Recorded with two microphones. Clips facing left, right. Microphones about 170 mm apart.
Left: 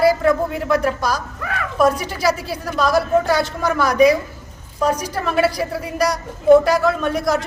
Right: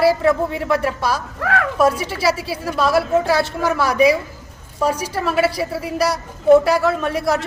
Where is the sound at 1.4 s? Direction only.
65° right (ahead or behind).